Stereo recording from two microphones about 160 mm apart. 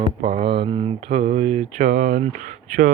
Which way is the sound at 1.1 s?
55° right (ahead or behind).